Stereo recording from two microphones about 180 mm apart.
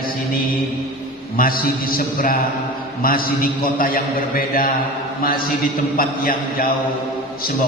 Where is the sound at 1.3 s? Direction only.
55° left (ahead or behind).